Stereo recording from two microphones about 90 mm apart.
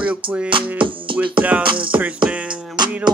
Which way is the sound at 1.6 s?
65° right (ahead or behind).